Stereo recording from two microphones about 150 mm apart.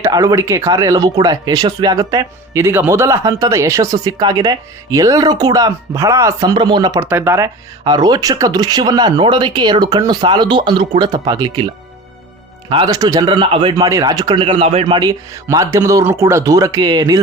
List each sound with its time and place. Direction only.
0.0 s speech: 25° right (ahead or behind)
7.0 s speech: 15° right (ahead or behind); by 14.9 s 40° right (ahead or behind)
14.9 s speech: 25° right (ahead or behind)